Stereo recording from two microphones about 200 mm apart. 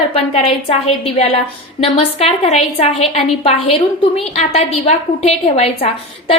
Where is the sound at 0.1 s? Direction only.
30° left (ahead or behind).